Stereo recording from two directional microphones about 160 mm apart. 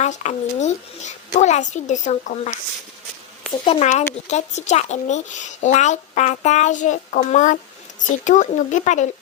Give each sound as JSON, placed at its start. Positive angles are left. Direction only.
{"t": 0.0, "sound": "speech", "side_deg": 45}
{"t": 3.6, "sound": "speech", "side_deg": 35}
{"t": 3.8, "sound": "speech", "side_deg": 45}